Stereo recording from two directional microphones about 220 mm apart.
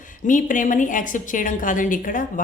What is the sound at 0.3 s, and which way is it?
A woman's voice, 35° left (ahead or behind).